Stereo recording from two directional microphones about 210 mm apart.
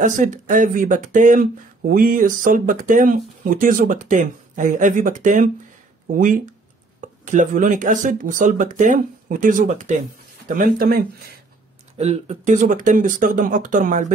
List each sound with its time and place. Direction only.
0.0 s speech: 35° right (ahead or behind)
12.0 s speech: 30° right (ahead or behind)